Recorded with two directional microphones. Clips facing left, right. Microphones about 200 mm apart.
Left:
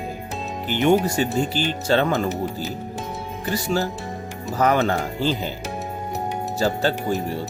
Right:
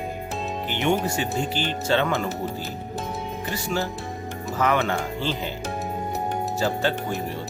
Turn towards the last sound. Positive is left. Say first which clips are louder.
# left 2 dB
turn(degrees=40)  # may be behind; listen again after turning